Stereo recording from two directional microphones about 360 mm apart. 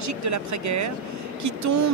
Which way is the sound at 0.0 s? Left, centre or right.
Right.